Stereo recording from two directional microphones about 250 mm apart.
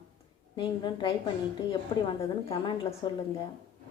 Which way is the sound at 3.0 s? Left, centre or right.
Centre.